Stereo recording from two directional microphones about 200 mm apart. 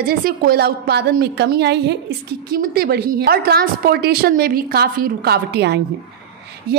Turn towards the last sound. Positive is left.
turn(degrees=-55)  # may be behind; listen again after turning